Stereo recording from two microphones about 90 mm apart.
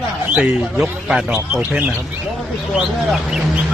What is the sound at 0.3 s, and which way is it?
A man's voice, 15° right (ahead or behind).